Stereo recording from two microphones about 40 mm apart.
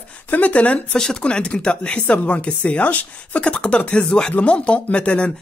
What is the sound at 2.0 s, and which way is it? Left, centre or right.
Speech, left.